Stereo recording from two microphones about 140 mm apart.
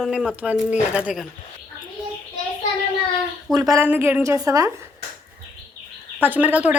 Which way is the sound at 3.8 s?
15° right (ahead or behind).